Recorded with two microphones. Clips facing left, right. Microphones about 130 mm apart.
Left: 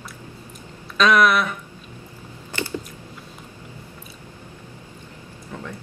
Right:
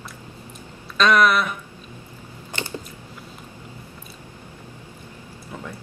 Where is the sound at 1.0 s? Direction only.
Centre (ahead or behind).